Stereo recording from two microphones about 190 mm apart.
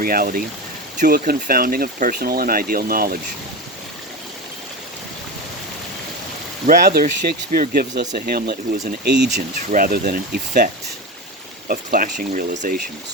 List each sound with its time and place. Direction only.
0.0 s speech: 50° right (ahead or behind)
6.7 s speech: 50° right (ahead or behind)
9.6 s speech: 50° right (ahead or behind)
11.7 s speech: 50° right (ahead or behind)